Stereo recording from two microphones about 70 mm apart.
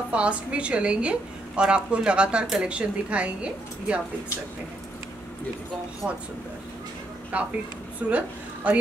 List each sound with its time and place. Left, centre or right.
0.1 s a woman's voice: centre
6.0 s a woman's voice: centre
7.3 s speech: right